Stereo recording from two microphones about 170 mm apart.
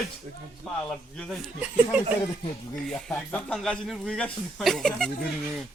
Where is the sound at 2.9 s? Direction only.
5° left (ahead or behind).